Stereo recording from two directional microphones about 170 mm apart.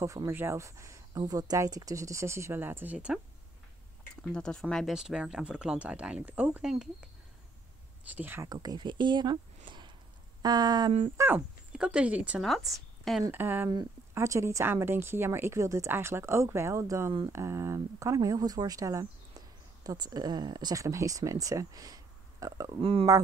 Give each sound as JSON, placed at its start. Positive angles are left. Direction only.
{"t": 0.0, "sound": "speech", "side_deg": -20}
{"t": 4.2, "sound": "speech", "side_deg": 5}
{"t": 8.0, "sound": "speech", "side_deg": -10}
{"t": 8.5, "sound": "speech", "side_deg": -25}
{"t": 9.7, "sound": "a sound", "side_deg": -25}
{"t": 10.4, "sound": "speech", "side_deg": -25}
{"t": 11.1, "sound": "speech", "side_deg": -10}
{"t": 13.2, "sound": "speech", "side_deg": -10}
{"t": 22.8, "sound": "speech", "side_deg": -35}